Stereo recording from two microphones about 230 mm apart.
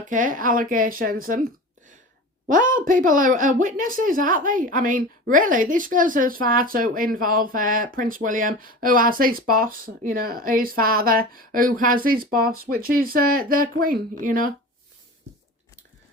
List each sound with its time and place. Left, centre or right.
0.1 s speech: right
2.5 s speech: right